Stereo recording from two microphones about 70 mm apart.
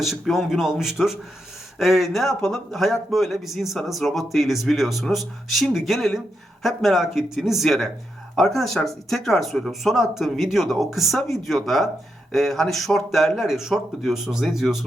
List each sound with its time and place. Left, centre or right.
0.0 s speech: centre